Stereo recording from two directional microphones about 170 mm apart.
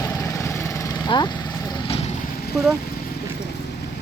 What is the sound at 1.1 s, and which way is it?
Vehicle, 30° left (ahead or behind).